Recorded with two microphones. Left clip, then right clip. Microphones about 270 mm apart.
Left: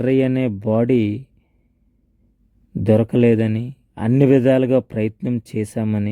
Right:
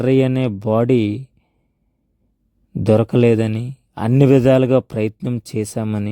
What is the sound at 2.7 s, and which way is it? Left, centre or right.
A man's voice, right.